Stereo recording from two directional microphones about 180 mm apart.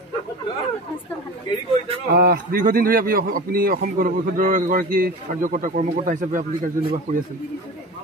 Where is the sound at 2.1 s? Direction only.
55° right (ahead or behind).